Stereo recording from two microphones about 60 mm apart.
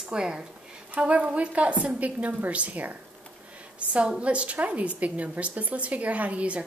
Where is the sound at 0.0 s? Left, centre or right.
Centre.